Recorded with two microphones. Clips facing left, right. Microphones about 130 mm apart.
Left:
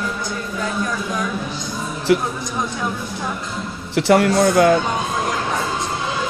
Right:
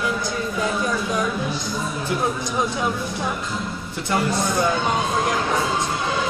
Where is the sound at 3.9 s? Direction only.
75° left (ahead or behind).